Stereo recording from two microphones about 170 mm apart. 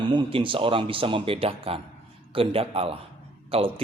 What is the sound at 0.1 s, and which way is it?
A man's voice, 30° right (ahead or behind).